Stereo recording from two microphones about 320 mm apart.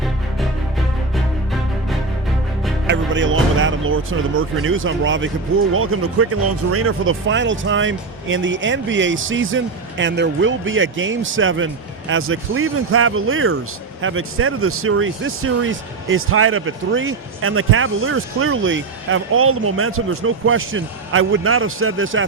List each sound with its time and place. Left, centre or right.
2.8 s speech: right